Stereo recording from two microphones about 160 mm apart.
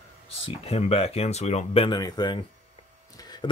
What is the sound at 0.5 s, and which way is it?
A man's voice, 40° left (ahead or behind).